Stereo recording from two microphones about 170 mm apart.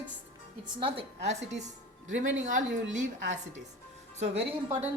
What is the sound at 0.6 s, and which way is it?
A woman's voice, 30° right (ahead or behind).